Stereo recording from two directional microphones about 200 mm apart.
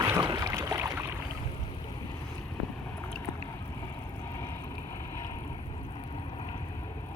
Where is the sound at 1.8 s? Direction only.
25° left (ahead or behind).